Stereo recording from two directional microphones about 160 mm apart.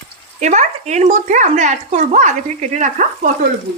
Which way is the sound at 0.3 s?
50° right (ahead or behind).